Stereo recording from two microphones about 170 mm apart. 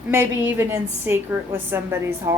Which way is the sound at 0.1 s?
15° right (ahead or behind).